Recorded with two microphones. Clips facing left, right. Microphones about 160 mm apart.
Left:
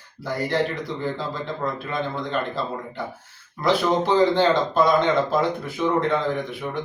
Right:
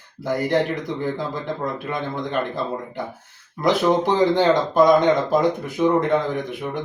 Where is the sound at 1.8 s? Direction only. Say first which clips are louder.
Right 1 dB; 15° right (ahead or behind).